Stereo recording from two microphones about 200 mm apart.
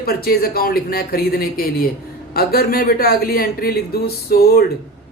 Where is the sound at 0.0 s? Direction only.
50° left (ahead or behind).